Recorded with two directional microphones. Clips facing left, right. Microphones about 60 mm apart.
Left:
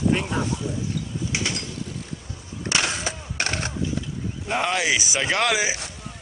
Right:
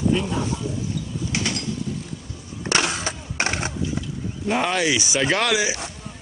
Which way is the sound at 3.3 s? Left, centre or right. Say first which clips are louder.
Right 3 dB; right.